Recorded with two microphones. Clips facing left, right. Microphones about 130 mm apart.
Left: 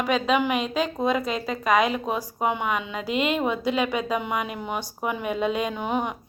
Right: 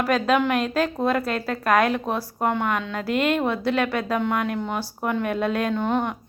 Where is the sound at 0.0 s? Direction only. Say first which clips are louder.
Right 2 dB; centre (ahead or behind).